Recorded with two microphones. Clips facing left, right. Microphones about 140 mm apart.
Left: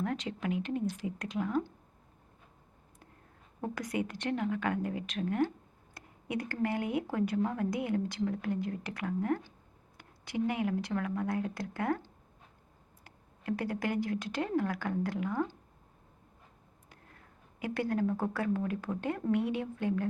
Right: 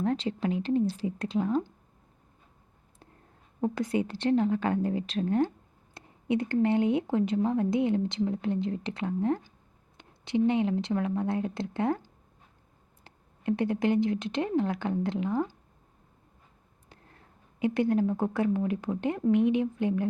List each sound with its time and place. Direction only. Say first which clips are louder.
0.0 s a woman's voice: right 6 dB; 30° right (ahead or behind)
3.6 s a woman's voice: right 6 dB; 25° right (ahead or behind)
13.1 s speech: right 6 dB; 25° right (ahead or behind)
17.6 s speech: right 6 dB; 20° right (ahead or behind)